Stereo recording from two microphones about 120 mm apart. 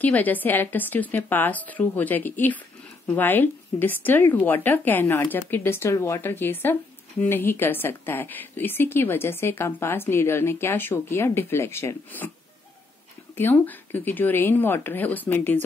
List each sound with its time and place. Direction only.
0.0 s speech: 15° left (ahead or behind)
13.4 s speech: 15° left (ahead or behind)